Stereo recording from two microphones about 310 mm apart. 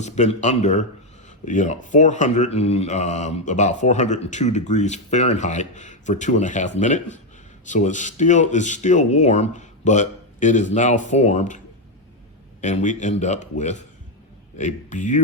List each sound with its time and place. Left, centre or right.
0.0 s speech: left
12.6 s speech: left